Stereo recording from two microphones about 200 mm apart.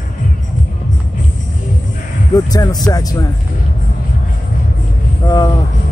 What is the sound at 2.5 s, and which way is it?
Speech, 20° left (ahead or behind).